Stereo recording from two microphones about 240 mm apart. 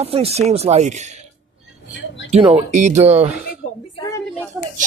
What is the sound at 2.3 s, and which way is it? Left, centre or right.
Speech, right.